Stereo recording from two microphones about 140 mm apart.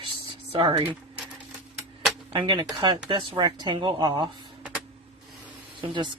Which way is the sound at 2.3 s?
35° right (ahead or behind).